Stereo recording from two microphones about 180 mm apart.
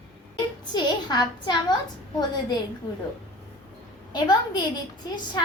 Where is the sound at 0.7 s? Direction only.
25° left (ahead or behind).